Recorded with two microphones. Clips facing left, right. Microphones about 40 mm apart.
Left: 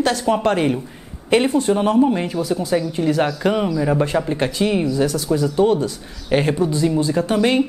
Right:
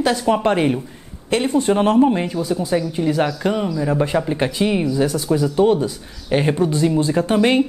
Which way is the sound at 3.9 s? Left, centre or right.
Centre.